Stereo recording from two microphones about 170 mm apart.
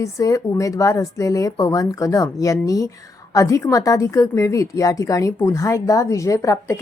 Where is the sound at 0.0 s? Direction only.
20° left (ahead or behind).